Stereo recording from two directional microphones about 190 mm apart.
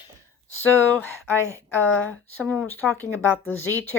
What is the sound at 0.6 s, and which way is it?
Speech, 10° left (ahead or behind).